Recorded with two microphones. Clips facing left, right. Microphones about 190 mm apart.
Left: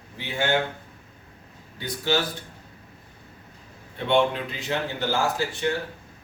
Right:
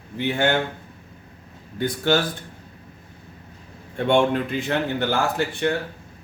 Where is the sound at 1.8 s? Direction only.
50° right (ahead or behind).